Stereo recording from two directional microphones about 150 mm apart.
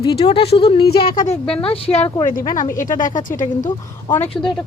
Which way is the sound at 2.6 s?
60° left (ahead or behind).